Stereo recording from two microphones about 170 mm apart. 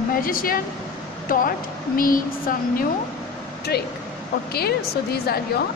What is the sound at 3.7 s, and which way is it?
A woman's voice, 70° left (ahead or behind).